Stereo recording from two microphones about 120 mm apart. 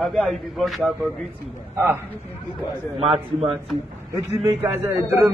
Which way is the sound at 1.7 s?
20° right (ahead or behind).